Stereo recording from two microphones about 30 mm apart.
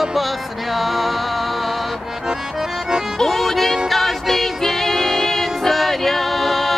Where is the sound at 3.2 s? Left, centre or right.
Centre.